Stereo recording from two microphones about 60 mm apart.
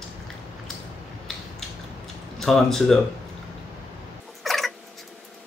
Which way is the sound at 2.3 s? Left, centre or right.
Centre.